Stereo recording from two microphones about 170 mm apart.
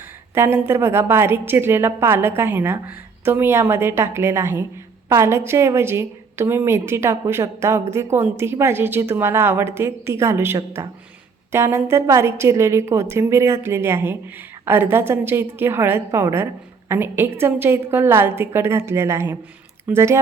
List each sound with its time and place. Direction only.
0.3 s a woman's voice: 15° right (ahead or behind)